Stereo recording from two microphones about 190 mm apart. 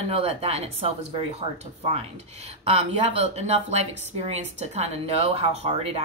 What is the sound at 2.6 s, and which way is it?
Speech, 35° right (ahead or behind).